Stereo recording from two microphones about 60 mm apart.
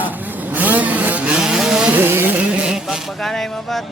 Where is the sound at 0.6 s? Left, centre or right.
Right.